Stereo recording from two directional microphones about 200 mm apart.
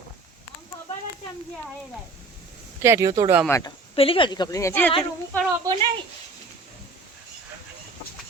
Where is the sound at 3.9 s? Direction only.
25° left (ahead or behind); by 4.9 s 10° left (ahead or behind).